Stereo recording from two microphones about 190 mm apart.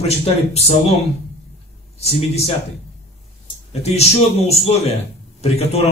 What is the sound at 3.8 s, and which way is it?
A man's voice, 35° left (ahead or behind).